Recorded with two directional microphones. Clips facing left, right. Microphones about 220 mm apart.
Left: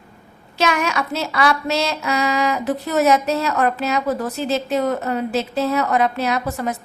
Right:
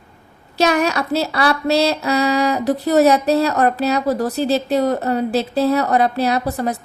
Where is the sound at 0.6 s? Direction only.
35° right (ahead or behind).